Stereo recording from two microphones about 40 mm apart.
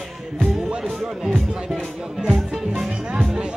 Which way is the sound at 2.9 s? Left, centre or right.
Right.